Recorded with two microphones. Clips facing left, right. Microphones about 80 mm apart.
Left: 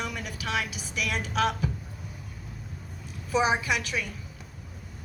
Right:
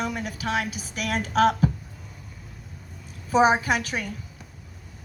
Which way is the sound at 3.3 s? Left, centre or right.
Right.